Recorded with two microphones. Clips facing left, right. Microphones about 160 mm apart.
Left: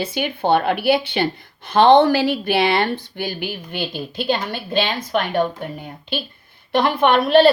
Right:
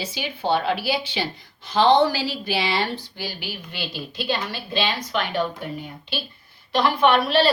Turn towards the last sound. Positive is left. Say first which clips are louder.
# left 5 dB
turn(degrees=50)  # may be behind; listen again after turning